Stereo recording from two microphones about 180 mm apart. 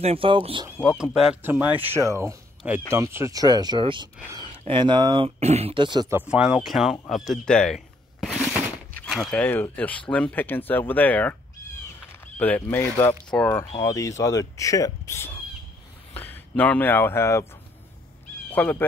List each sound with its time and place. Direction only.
0.0 s speech: 30° right (ahead or behind)
0.7 s speech: 5° right (ahead or behind); by 6.1 s 25° right (ahead or behind)
6.1 s speech: 5° right (ahead or behind)
12.4 s speech: 10° left (ahead or behind)
13.7 s speech: 20° left (ahead or behind)
18.5 s speech: 10° left (ahead or behind)